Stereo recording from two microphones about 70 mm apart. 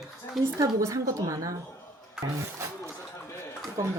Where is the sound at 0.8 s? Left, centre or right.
Right.